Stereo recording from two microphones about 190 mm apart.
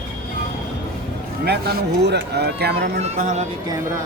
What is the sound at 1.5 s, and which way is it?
Speech, 60° right (ahead or behind).